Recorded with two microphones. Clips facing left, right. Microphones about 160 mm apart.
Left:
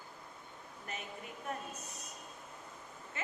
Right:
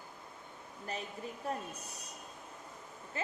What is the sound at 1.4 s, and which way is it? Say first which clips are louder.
Speech: right 3 dB; 30° right (ahead or behind).